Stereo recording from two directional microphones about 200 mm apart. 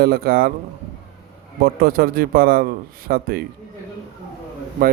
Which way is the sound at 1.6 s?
45° right (ahead or behind).